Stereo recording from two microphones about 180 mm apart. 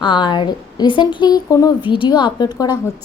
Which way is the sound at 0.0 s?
25° left (ahead or behind).